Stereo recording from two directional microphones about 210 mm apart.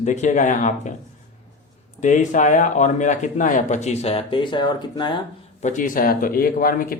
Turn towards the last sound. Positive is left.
turn(degrees=45)  # may be behind; listen again after turning